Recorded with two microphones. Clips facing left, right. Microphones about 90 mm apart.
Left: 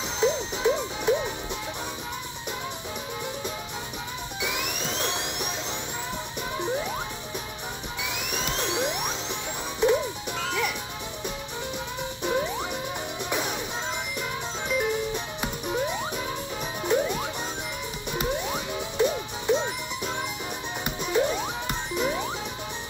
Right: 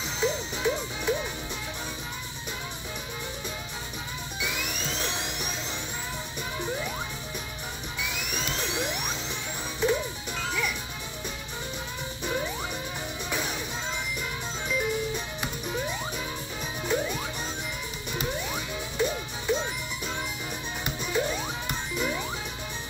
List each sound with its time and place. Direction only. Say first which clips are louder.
0.2 s music: left 4 dB; 20° left (ahead or behind)
4.4 s music: left 2 dB; 20° left (ahead or behind)
8.0 s music: left 2 dB; 20° left (ahead or behind)
12.2 s music: left 4 dB; 20° left (ahead or behind)
14.7 s music: left 2 dB; 20° left (ahead or behind)
21.0 s music: left 4 dB; 20° left (ahead or behind)